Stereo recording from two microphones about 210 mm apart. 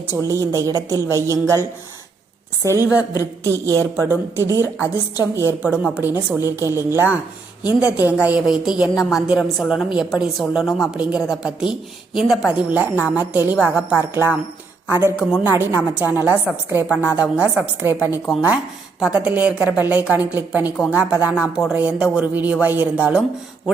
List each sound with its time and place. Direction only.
0.2 s a woman's voice: 15° right (ahead or behind)
2.6 s a woman's voice: 15° right (ahead or behind)
4.6 s a woman's voice: 15° left (ahead or behind)
5.2 s a woman's voice: 10° right (ahead or behind)